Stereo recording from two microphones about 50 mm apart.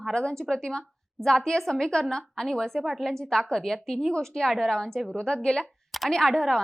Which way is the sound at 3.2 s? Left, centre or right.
Centre.